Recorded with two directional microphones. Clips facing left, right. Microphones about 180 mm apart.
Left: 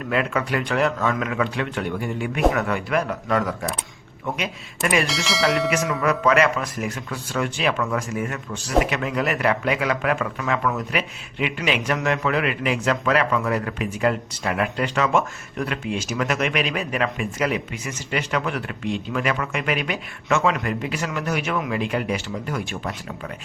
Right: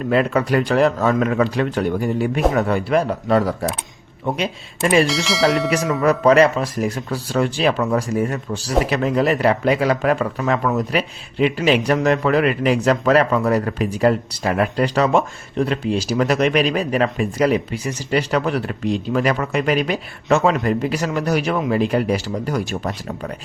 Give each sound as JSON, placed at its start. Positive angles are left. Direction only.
{"t": 0.1, "sound": "speech", "side_deg": -35}
{"t": 5.0, "sound": "speech", "side_deg": 0}
{"t": 5.7, "sound": "speech", "side_deg": -35}